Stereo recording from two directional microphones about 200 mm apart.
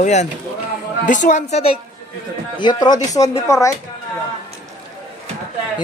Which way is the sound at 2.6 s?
20° left (ahead or behind).